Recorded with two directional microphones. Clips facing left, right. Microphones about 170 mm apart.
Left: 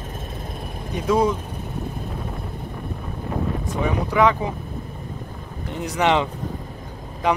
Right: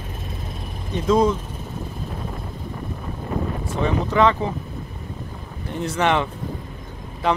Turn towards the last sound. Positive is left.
turn(degrees=15)  # may be behind; listen again after turning